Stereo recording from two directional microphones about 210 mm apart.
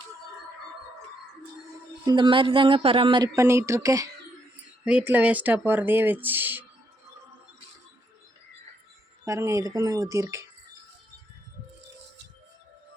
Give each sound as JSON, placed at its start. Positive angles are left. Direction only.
{"t": 2.0, "sound": "speech", "side_deg": -20}
{"t": 9.2, "sound": "speech", "side_deg": -15}